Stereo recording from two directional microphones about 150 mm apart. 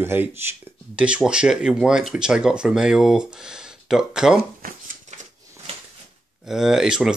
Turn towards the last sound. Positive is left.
turn(degrees=-5)  # may be behind; listen again after turning